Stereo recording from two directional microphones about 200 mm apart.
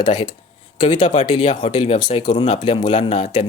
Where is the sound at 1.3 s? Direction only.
35° left (ahead or behind).